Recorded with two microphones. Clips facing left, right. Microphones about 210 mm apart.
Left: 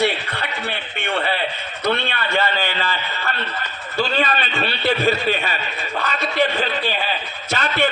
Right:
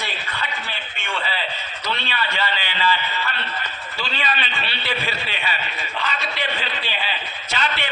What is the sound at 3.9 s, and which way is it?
A man's voice, 45° left (ahead or behind).